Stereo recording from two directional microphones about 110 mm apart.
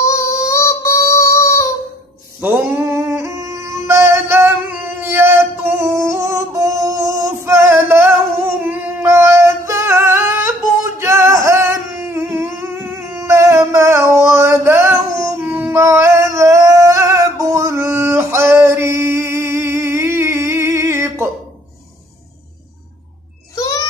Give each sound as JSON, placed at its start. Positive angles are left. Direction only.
{"t": 0.0, "sound": "child singing", "side_deg": 30}
{"t": 2.4, "sound": "music", "side_deg": -25}
{"t": 8.6, "sound": "singing", "side_deg": -25}
{"t": 12.1, "sound": "music", "side_deg": -25}
{"t": 15.6, "sound": "singing", "side_deg": -25}
{"t": 23.5, "sound": "a sound", "side_deg": 35}